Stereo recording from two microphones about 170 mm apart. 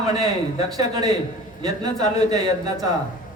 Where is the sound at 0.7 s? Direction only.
25° right (ahead or behind).